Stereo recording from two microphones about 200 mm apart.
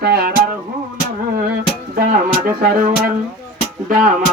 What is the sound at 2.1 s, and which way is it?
Speech, 45° right (ahead or behind).